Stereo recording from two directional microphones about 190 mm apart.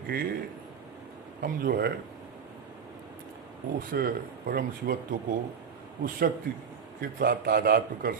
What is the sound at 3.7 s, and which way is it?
A man's voice, 50° right (ahead or behind).